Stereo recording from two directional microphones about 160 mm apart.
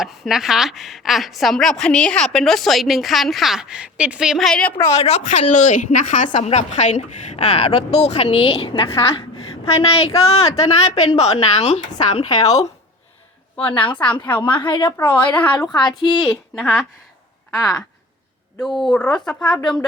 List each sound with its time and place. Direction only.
0.0 s a woman's voice: centre (ahead or behind)
4.9 s a woman's voice: 40° left (ahead or behind)
12.3 s speech: 20° left (ahead or behind)
13.6 s a woman's voice: 10° left (ahead or behind)
14.4 s speech: 30° left (ahead or behind)
14.9 s a woman's voice: 10° left (ahead or behind)
15.5 s speech: 25° left (ahead or behind)
16.2 s a woman's voice: centre (ahead or behind)
18.6 s a woman's voice: centre (ahead or behind)